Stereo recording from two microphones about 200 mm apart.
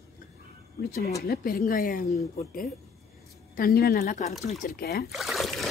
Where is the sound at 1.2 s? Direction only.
50° left (ahead or behind).